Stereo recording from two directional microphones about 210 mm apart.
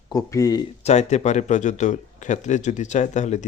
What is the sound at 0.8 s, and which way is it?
Speech, 30° left (ahead or behind).